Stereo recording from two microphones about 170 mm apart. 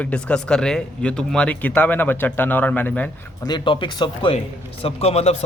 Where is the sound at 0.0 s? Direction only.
5° left (ahead or behind).